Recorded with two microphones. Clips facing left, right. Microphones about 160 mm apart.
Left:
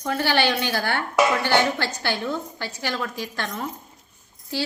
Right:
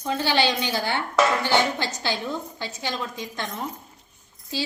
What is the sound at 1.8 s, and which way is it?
Speech, 65° left (ahead or behind).